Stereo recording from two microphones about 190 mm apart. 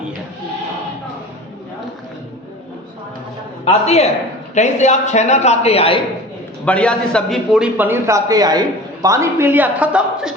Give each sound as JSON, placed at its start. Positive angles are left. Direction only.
{"t": 3.7, "sound": "a man's voice", "side_deg": 35}
{"t": 6.7, "sound": "a man's voice", "side_deg": 5}